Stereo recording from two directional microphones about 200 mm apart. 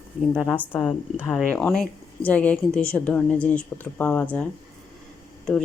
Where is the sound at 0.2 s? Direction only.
Centre (ahead or behind).